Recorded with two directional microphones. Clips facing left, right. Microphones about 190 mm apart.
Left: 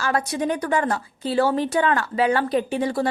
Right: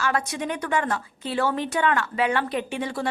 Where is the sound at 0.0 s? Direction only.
35° left (ahead or behind).